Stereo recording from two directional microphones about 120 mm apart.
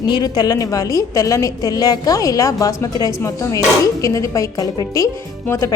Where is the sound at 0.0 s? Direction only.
35° left (ahead or behind).